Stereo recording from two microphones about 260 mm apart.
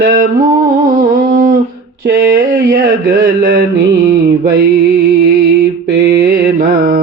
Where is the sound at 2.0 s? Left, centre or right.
Right.